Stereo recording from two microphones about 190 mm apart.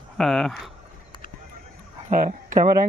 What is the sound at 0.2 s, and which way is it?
Speech, centre (ahead or behind).